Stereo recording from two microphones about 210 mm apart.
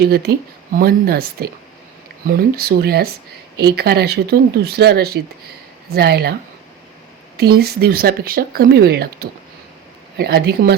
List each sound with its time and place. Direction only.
0.0 s speech: 50° right (ahead or behind)
7.3 s speech: 50° right (ahead or behind)